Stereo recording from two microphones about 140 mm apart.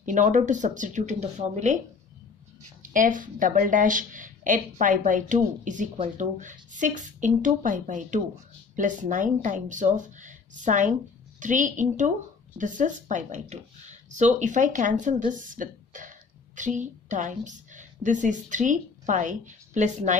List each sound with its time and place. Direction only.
0.0 s speech: 65° right (ahead or behind)
2.8 s speech: 70° right (ahead or behind)